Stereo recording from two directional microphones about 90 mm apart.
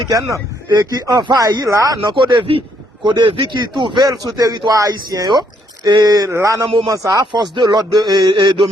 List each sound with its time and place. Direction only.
0.1 s speech: 40° right (ahead or behind)
0.7 s speech: 50° right (ahead or behind)
2.1 s speech: 65° right (ahead or behind)
4.0 s speech: 40° right (ahead or behind)
6.2 s speech: 35° right (ahead or behind)
7.5 s speech: 60° right (ahead or behind)